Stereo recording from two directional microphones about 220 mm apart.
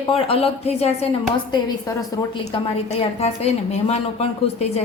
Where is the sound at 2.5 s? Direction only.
25° left (ahead or behind).